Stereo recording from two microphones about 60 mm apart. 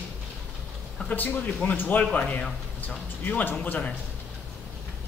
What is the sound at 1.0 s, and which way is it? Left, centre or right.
Speech, left.